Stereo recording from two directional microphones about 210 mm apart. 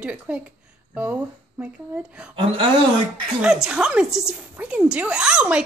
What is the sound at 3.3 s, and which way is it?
A woman's voice, 5° right (ahead or behind).